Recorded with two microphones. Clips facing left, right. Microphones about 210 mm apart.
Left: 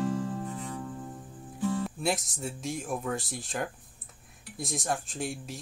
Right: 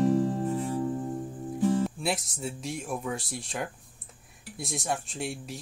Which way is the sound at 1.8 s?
Centre (ahead or behind).